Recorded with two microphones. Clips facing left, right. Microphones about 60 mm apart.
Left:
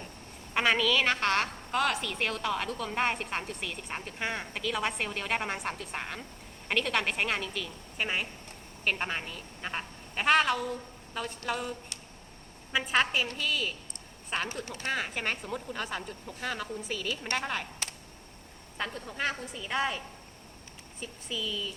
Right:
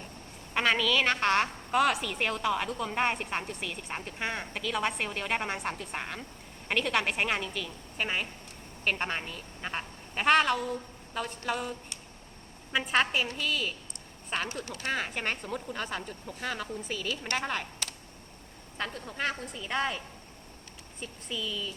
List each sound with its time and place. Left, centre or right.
0.5 s a woman's voice: centre
2.9 s a woman's voice: centre
12.7 s a woman's voice: centre
14.5 s speech: left
14.8 s a woman's voice: centre
18.8 s a woman's voice: centre
21.0 s a woman's voice: centre